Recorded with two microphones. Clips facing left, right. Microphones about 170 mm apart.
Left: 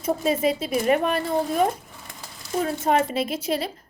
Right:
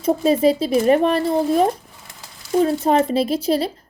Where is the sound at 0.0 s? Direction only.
35° right (ahead or behind).